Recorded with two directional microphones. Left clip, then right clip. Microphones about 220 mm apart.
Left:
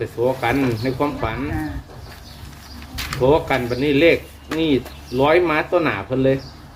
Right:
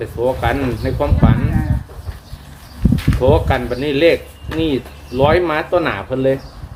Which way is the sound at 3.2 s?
5° right (ahead or behind).